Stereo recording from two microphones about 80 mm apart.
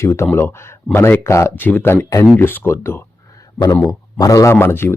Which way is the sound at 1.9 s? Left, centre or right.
Left.